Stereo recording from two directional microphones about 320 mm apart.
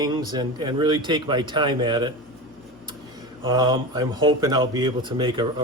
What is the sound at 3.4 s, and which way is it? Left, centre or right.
Speech, centre.